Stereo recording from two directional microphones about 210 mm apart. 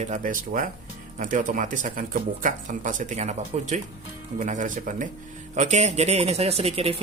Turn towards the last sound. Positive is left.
turn(degrees=-30)  # may be behind; listen again after turning